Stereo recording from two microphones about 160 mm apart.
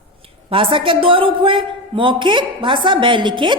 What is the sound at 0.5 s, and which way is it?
A woman's voice, 35° right (ahead or behind).